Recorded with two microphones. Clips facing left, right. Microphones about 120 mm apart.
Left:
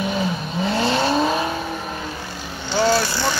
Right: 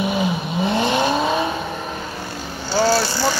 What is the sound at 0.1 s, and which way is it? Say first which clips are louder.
Vehicle: right 2 dB; 15° right (ahead or behind).